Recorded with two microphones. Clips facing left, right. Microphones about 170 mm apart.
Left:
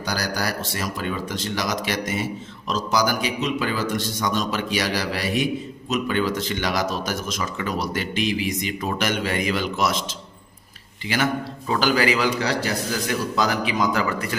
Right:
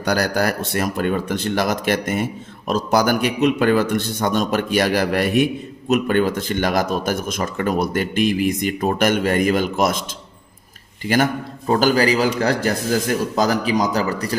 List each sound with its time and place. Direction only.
0.0 s speech: 55° right (ahead or behind)
11.0 s a man's voice: 50° right (ahead or behind)